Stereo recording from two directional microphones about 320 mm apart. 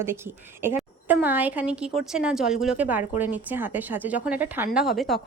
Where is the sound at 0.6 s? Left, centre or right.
Centre.